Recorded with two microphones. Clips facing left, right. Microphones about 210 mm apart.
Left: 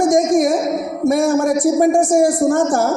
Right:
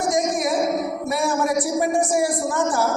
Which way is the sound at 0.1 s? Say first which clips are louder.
Left 8 dB; 45° left (ahead or behind).